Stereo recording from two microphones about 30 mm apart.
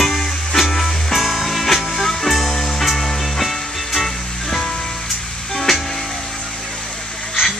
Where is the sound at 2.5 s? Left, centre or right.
Centre.